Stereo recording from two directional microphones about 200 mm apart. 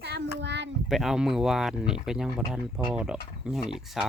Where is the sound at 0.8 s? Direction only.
Centre (ahead or behind).